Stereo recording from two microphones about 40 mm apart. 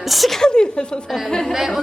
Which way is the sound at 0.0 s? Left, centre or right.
Centre.